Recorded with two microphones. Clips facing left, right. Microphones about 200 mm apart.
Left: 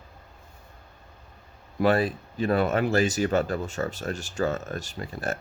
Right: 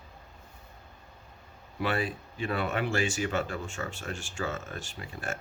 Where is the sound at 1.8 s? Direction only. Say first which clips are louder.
Left 8 dB; 40° left (ahead or behind).